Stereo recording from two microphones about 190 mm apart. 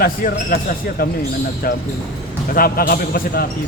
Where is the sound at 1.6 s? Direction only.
50° left (ahead or behind).